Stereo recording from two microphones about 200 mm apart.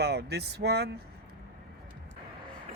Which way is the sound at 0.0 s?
55° right (ahead or behind).